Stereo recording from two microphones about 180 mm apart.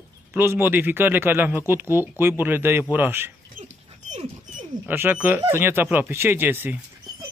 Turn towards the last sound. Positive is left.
turn(degrees=-10)  # may be behind; listen again after turning